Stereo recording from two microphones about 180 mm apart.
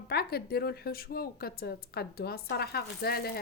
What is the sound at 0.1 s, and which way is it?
Speech, 60° left (ahead or behind).